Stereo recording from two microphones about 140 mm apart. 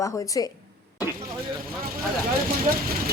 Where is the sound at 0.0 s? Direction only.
25° left (ahead or behind).